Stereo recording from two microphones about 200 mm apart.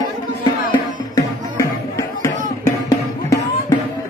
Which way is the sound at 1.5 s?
15° left (ahead or behind).